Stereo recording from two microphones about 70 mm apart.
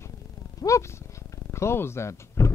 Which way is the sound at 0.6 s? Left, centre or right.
Left.